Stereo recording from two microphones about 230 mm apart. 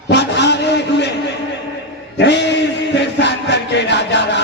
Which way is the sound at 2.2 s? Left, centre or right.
Left.